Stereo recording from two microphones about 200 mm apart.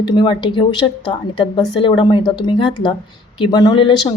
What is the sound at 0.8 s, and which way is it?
Speech, 10° left (ahead or behind).